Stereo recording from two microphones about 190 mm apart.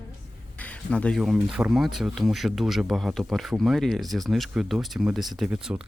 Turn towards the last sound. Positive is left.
turn(degrees=-5)  # may be behind; listen again after turning